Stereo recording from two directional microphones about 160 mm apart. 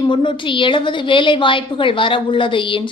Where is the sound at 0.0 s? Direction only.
30° left (ahead or behind).